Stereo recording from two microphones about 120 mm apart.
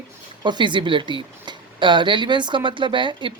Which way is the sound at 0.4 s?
40° right (ahead or behind).